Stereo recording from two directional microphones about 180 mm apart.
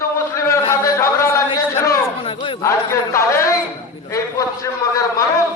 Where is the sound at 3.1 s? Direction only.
15° left (ahead or behind).